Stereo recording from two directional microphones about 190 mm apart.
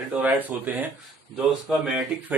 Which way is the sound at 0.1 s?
10° right (ahead or behind).